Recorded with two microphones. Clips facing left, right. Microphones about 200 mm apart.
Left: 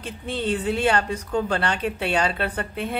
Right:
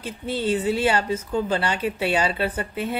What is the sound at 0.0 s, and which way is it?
Speech, 5° right (ahead or behind).